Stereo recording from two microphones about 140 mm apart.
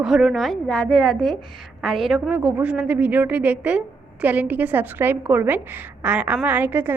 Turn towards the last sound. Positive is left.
turn(degrees=-15)  # may be behind; listen again after turning